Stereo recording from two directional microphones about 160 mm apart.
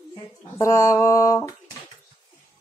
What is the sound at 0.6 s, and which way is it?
Speech, 20° left (ahead or behind).